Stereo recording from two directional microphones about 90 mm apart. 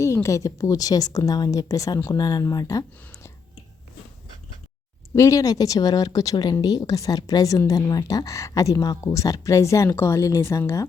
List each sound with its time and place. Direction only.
0.0 s a woman's voice: 35° left (ahead or behind)
5.1 s speech: 35° left (ahead or behind)